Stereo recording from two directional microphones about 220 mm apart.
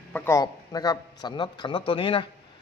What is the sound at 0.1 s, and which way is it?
A man's voice, 15° left (ahead or behind).